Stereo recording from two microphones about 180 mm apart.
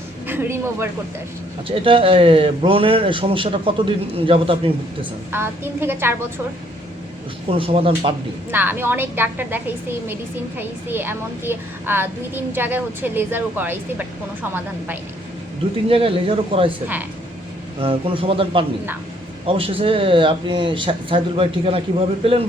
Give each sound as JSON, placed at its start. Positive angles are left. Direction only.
{"t": 0.3, "sound": "speech", "side_deg": -15}
{"t": 1.6, "sound": "a man's voice", "side_deg": -30}
{"t": 5.3, "sound": "a woman's voice", "side_deg": -10}
{"t": 7.5, "sound": "a man's voice", "side_deg": -30}
{"t": 8.4, "sound": "a woman's voice", "side_deg": -10}
{"t": 15.9, "sound": "a man's voice", "side_deg": -30}
{"t": 17.7, "sound": "a man's voice", "side_deg": -30}